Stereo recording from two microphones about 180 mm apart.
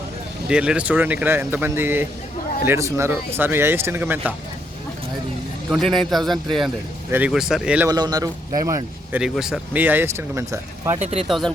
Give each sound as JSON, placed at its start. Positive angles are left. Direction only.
{"t": 0.4, "sound": "speech", "side_deg": -5}
{"t": 5.7, "sound": "a man's voice", "side_deg": 0}
{"t": 7.9, "sound": "speech", "side_deg": -20}
{"t": 9.1, "sound": "speech", "side_deg": -5}
{"t": 10.9, "sound": "speech", "side_deg": -35}
{"t": 11.3, "sound": "a man's voice", "side_deg": 0}